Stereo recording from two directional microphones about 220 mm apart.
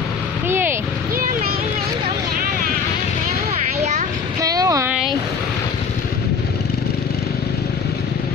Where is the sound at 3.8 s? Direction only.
30° right (ahead or behind).